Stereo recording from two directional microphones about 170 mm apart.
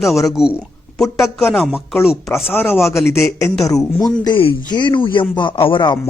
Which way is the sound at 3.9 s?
Centre (ahead or behind).